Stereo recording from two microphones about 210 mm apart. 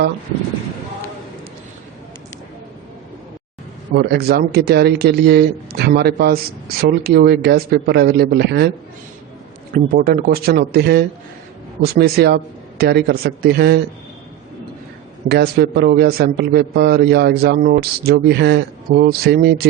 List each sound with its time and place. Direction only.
3.9 s a man's voice: 50° right (ahead or behind)
9.7 s a man's voice: 45° right (ahead or behind)
15.3 s a man's voice: 50° right (ahead or behind)